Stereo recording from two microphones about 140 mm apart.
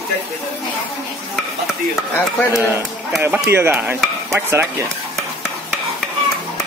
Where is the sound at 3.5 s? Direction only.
15° right (ahead or behind).